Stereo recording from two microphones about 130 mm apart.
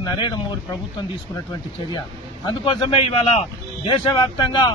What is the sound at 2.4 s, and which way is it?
A man's voice, 40° left (ahead or behind).